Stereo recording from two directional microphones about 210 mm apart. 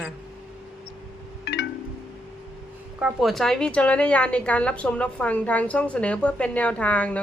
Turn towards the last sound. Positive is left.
turn(degrees=5)  # may be behind; listen again after turning